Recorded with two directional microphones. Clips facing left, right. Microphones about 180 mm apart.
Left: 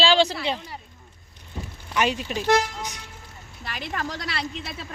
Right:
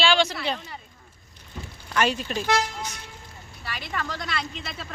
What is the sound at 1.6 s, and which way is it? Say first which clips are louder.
Rain on surface: left 3 dB; 25° left (ahead or behind).